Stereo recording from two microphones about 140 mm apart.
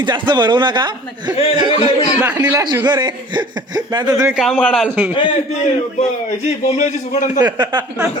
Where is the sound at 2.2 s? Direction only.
10° right (ahead or behind).